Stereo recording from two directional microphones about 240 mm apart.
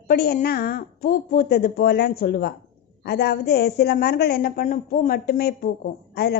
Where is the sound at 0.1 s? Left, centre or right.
Left.